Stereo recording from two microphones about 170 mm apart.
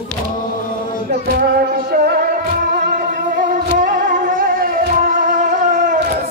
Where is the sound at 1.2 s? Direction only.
60° right (ahead or behind).